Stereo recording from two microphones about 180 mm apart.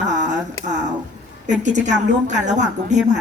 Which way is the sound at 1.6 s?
40° right (ahead or behind).